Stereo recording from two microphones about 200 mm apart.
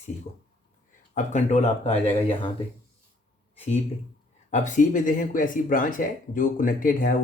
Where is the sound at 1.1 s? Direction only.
40° left (ahead or behind).